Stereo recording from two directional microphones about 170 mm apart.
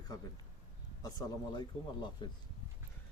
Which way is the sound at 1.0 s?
20° left (ahead or behind).